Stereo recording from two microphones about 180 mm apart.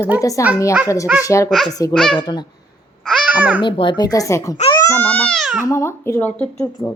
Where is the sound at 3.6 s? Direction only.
25° left (ahead or behind); by 5.6 s centre (ahead or behind).